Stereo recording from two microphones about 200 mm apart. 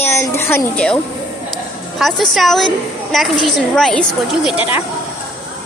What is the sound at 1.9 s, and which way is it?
A woman's voice, centre (ahead or behind).